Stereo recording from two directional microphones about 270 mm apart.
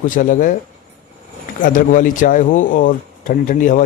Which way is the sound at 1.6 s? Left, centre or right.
Left.